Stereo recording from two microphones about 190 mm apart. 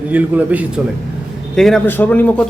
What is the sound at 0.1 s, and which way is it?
Speech, 10° right (ahead or behind).